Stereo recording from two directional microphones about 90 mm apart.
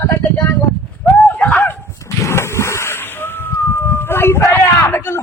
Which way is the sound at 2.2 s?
30° left (ahead or behind).